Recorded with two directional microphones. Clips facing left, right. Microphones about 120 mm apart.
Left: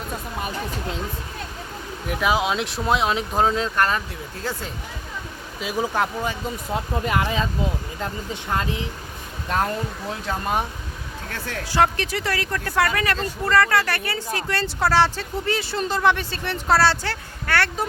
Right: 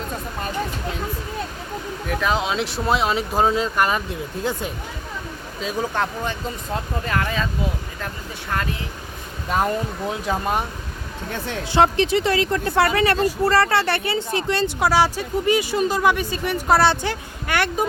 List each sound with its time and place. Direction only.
2.0 s speech: 10° left (ahead or behind); by 4.6 s 20° right (ahead or behind)
5.5 s speech: 10° left (ahead or behind)
7.0 s speech: 20° left (ahead or behind)
9.5 s a woman's voice: 5° right (ahead or behind)